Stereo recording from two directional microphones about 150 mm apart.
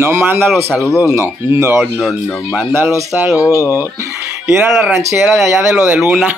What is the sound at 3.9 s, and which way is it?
Chicken, 15° right (ahead or behind).